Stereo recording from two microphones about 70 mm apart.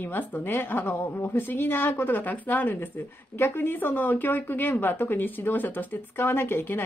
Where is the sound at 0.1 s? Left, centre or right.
Left.